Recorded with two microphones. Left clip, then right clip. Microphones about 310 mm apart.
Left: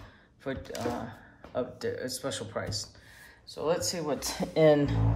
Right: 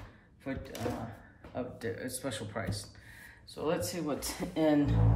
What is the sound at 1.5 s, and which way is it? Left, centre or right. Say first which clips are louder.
Speech: left 5 dB; centre.